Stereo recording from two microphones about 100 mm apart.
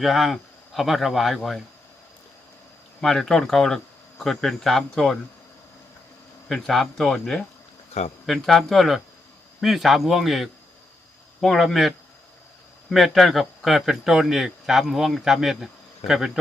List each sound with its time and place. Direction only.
0.0 s speech: centre (ahead or behind)
3.0 s speech: 5° left (ahead or behind)
6.5 s speech: centre (ahead or behind)
8.0 s speech: 90° left
8.3 s speech: centre (ahead or behind)